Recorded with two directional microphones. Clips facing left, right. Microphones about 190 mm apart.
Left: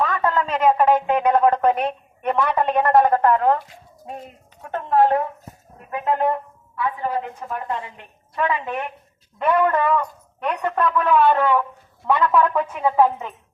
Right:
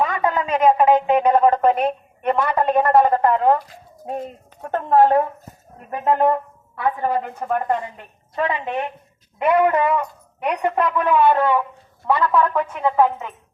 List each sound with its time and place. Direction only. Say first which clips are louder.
0.0 s speech: right 1 dB; 15° right (ahead or behind)
4.6 s a woman's voice: right 2 dB; 40° right (ahead or behind)
8.4 s a woman's voice: right 1 dB; 30° right (ahead or behind); by 13.1 s 5° left (ahead or behind)